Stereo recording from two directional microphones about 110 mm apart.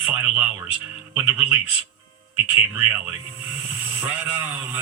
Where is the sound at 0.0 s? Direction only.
15° right (ahead or behind).